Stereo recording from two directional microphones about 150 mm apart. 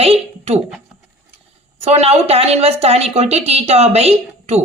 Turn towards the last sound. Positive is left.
turn(degrees=-45)  # may be behind; listen again after turning